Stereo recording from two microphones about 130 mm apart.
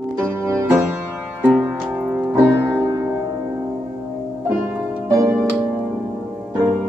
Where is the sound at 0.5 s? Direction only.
20° right (ahead or behind).